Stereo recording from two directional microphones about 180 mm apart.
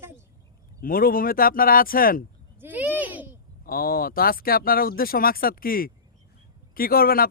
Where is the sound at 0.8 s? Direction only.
55° left (ahead or behind).